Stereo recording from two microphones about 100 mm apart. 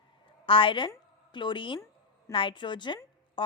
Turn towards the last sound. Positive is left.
turn(degrees=50)  # may be behind; listen again after turning